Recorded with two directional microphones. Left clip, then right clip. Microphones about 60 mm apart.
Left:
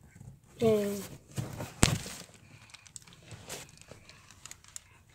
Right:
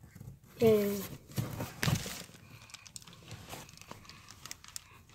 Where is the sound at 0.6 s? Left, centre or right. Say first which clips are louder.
Right 1 dB; left.